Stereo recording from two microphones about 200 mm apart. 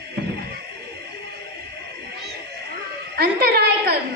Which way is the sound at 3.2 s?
50° right (ahead or behind).